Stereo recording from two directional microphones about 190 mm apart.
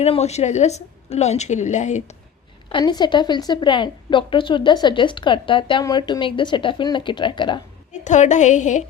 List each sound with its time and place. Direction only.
0.0 s a woman's voice: 35° left (ahead or behind)
2.6 s a woman's voice: 25° left (ahead or behind)
8.0 s a woman's voice: 40° left (ahead or behind)